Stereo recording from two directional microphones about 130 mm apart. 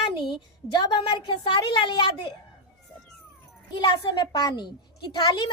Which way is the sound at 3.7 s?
35° left (ahead or behind).